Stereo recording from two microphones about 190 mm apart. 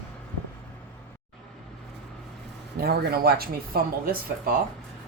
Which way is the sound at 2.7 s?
55° right (ahead or behind).